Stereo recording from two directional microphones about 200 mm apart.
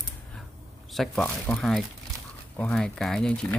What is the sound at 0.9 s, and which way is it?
Speech, centre (ahead or behind).